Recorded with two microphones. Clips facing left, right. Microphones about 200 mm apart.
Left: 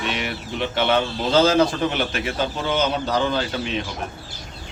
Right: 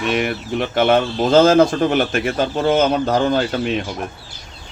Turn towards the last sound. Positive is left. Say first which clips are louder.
# right 6 dB
turn(degrees=-50)  # may be behind; listen again after turning